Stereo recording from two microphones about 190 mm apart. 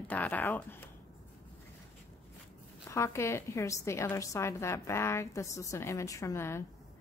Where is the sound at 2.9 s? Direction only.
15° left (ahead or behind).